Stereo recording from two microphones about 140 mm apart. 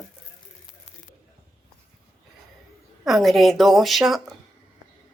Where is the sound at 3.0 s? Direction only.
Centre (ahead or behind).